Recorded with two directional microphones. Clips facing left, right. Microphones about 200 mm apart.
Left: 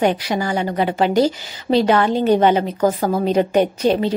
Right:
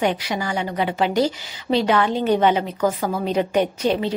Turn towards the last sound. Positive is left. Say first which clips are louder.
# left 4 dB
turn(degrees=40)  # may be behind; listen again after turning